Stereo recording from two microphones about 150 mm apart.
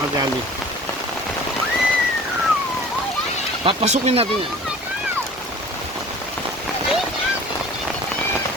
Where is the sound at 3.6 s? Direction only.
45° right (ahead or behind).